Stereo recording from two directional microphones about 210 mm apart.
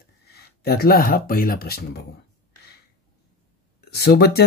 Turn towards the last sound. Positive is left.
turn(degrees=50)  # may be behind; listen again after turning